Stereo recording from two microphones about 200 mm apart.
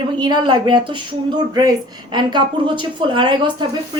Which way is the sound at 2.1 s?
25° right (ahead or behind).